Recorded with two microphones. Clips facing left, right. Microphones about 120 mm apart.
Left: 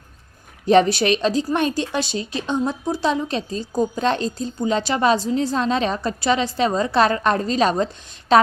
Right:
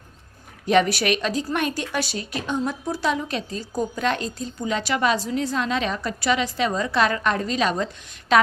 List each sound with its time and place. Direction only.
0.6 s a woman's voice: 30° left (ahead or behind)